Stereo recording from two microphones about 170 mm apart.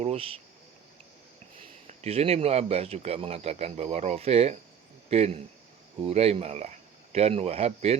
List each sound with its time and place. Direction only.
0.0 s cricket: 35° right (ahead or behind)
1.9 s a man's voice: 40° right (ahead or behind)